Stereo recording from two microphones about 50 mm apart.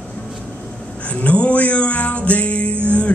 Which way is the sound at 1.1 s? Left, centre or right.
Left.